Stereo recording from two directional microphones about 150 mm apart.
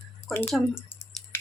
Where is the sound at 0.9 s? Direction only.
10° left (ahead or behind).